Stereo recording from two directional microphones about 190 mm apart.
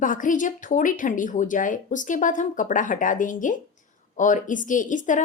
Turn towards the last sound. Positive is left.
turn(degrees=40)  # may be behind; listen again after turning